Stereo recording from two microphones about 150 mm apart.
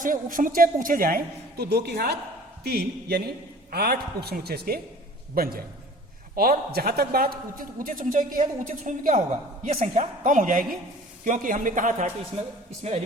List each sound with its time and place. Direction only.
0.0 s a man's voice: 65° right (ahead or behind); by 4.8 s 90° right
5.3 s a man's voice: 80° right; by 12.1 s 55° right (ahead or behind)